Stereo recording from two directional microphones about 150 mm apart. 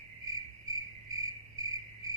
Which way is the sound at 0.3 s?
25° right (ahead or behind).